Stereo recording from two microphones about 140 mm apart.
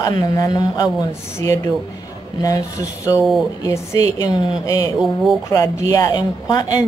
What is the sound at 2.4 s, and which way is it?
A woman's voice, 25° left (ahead or behind).